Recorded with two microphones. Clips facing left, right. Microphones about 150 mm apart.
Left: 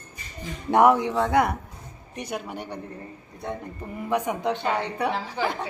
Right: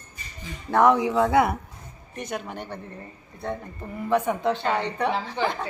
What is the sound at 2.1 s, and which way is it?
Speech, 10° left (ahead or behind).